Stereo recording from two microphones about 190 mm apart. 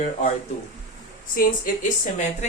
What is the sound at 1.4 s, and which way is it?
Speech, 45° left (ahead or behind).